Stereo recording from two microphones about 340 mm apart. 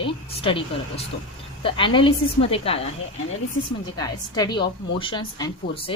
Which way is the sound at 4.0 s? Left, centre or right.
Centre.